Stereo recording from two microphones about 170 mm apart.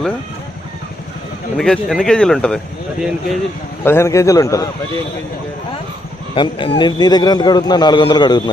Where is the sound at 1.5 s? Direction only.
5° left (ahead or behind).